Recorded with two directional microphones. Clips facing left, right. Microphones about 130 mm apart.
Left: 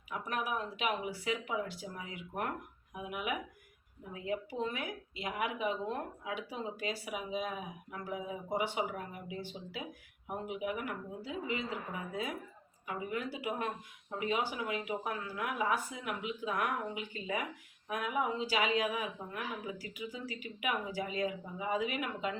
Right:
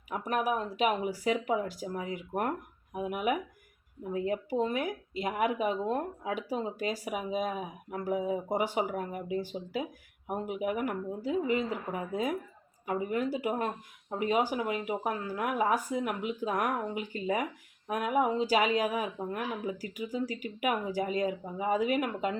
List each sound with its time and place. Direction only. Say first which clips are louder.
0.1 s speech: right 6 dB; 40° right (ahead or behind)